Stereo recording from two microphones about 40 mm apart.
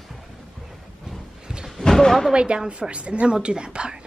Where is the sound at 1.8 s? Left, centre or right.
Centre.